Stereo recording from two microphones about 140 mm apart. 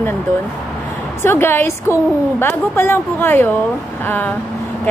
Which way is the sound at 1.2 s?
15° left (ahead or behind).